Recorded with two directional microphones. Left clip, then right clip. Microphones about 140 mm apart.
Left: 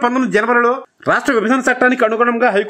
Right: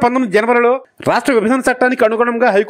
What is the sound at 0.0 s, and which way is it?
Speech, 40° right (ahead or behind).